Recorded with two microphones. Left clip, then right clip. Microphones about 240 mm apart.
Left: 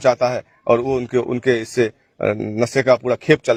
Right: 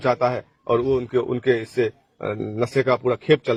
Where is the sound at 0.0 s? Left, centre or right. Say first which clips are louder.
Left 4 dB; left.